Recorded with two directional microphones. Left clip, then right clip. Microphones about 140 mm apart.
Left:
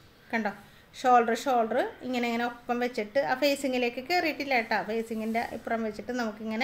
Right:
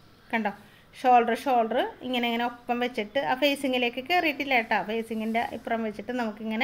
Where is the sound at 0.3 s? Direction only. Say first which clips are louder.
Right 2 dB; 20° right (ahead or behind).